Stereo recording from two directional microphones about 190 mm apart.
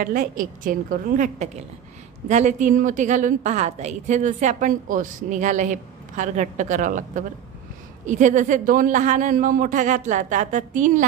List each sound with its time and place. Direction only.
0.0 s a woman's voice: 50° right (ahead or behind)